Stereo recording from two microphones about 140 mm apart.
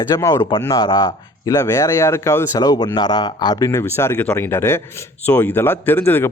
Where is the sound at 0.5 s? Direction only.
30° left (ahead or behind).